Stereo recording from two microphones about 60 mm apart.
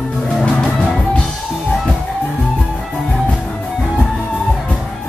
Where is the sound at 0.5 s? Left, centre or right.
Centre.